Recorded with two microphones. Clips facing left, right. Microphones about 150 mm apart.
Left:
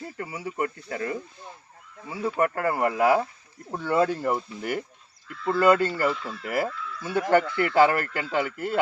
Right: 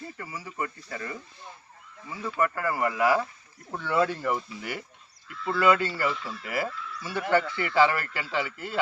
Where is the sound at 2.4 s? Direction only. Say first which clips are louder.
Left 2 dB; 55° left (ahead or behind).